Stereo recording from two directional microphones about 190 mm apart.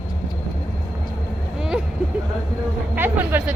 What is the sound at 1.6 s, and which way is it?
Vehicle, 5° right (ahead or behind).